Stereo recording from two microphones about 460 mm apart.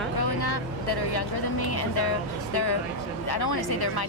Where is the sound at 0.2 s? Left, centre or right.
Left.